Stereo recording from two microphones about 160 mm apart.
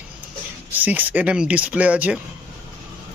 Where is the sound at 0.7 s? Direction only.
10° right (ahead or behind).